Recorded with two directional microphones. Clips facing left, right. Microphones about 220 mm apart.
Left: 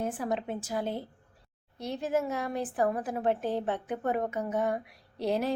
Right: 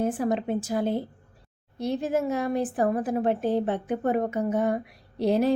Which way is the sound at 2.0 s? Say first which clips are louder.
Right 2 dB; 30° right (ahead or behind).